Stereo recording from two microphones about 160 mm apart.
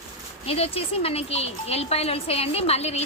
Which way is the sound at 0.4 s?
40° left (ahead or behind).